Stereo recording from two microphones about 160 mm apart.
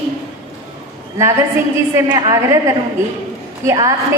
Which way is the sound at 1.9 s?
25° right (ahead or behind).